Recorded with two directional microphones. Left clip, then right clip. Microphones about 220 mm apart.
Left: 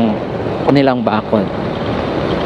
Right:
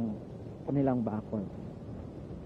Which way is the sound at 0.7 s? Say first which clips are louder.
Left 15 dB; 15° left (ahead or behind).